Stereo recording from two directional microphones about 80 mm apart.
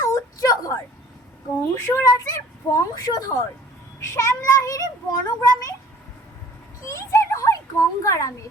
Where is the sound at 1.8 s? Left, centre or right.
Left.